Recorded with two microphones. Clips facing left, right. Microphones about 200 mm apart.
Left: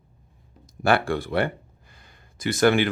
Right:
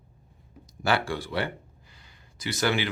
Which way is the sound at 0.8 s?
55° left (ahead or behind).